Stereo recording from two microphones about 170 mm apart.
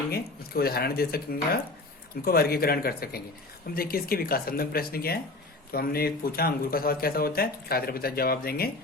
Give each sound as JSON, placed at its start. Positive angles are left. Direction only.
{"t": 0.1, "sound": "speech", "side_deg": 65}